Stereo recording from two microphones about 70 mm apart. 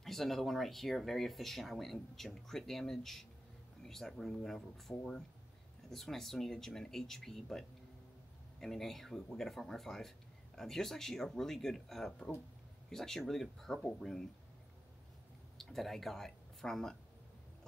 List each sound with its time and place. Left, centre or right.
0.0 s speech: centre
15.5 s speech: centre